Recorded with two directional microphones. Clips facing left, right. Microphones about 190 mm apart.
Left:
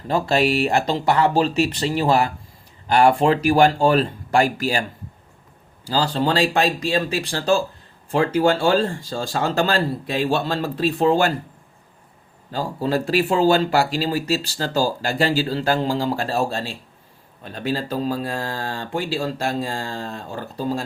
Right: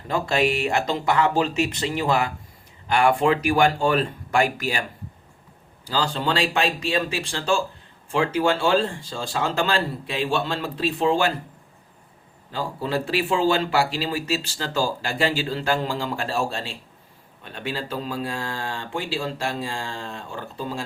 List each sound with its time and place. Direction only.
0.1 s speech: 35° left (ahead or behind)
12.5 s speech: 40° left (ahead or behind)